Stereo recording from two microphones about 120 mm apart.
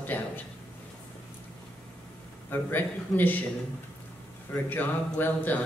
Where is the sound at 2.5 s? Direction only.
15° left (ahead or behind).